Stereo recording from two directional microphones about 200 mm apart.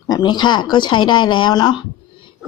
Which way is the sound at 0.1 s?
20° left (ahead or behind).